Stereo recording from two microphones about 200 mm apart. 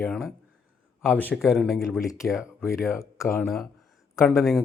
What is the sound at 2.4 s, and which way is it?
Speech, 15° left (ahead or behind).